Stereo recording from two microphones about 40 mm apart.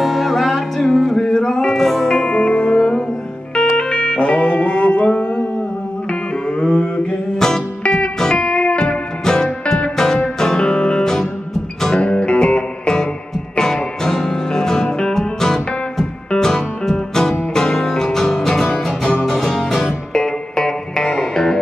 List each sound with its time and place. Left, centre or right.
0.0 s music: centre
1.2 s music: centre
2.1 s music: left
6.6 s a sound: left
7.3 s music: centre
7.8 s music: left
12.0 s music: left; by 19.9 s centre
20.2 s music: centre